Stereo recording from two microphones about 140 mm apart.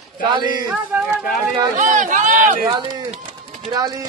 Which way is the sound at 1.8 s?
65° right (ahead or behind).